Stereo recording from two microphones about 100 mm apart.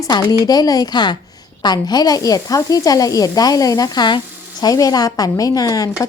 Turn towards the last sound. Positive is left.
turn(degrees=35)  # may be behind; listen again after turning